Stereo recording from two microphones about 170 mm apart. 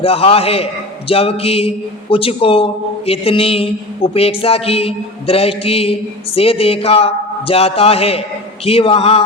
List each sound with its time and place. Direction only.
0.0 s speech: 35° left (ahead or behind)